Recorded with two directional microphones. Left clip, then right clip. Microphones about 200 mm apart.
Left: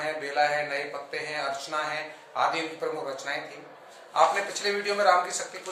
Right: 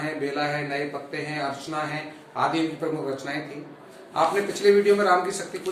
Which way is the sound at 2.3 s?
15° left (ahead or behind).